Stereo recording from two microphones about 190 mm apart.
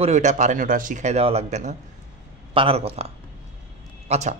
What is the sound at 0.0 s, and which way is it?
Speech, 40° right (ahead or behind).